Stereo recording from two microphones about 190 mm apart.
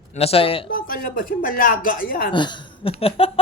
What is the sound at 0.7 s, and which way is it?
Speech, 50° left (ahead or behind).